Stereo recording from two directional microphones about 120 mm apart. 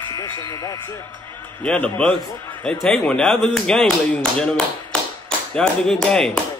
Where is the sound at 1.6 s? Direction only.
10° left (ahead or behind).